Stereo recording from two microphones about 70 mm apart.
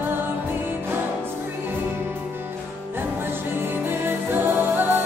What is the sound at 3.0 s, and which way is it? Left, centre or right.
Music, right.